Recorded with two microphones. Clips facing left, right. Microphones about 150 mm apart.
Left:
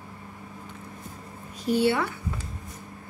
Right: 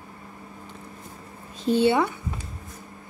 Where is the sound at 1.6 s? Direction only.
20° right (ahead or behind).